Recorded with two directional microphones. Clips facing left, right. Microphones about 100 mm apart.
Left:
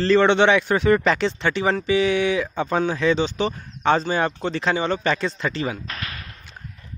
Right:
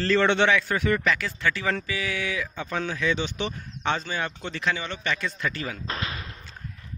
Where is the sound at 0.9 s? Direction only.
35° left (ahead or behind).